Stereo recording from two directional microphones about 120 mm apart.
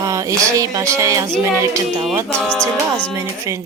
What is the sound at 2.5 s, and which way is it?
Music, 10° left (ahead or behind).